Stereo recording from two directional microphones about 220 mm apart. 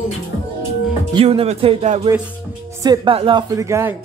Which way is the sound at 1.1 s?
25° right (ahead or behind).